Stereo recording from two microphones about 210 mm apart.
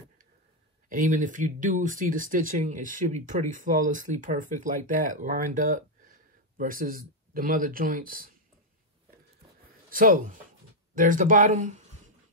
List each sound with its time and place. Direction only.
0.8 s speech: 40° right (ahead or behind)
9.8 s speech: 40° right (ahead or behind)